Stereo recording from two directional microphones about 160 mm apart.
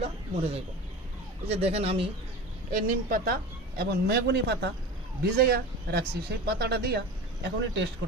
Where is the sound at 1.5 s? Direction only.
40° right (ahead or behind).